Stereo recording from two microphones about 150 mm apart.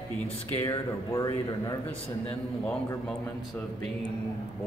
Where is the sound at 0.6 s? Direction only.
25° left (ahead or behind).